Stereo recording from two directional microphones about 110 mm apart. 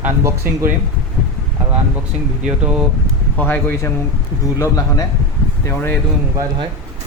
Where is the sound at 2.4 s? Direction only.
10° right (ahead or behind).